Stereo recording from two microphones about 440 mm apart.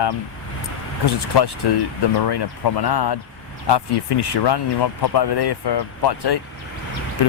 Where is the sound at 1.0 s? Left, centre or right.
Left.